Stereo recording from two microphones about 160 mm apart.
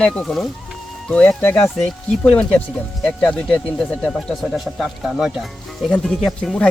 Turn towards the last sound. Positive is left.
turn(degrees=5)  # may be behind; listen again after turning